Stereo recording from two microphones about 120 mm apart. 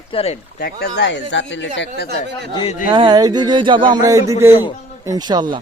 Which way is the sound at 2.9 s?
40° right (ahead or behind).